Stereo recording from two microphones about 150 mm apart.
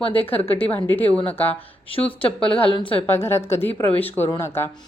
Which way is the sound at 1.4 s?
35° left (ahead or behind).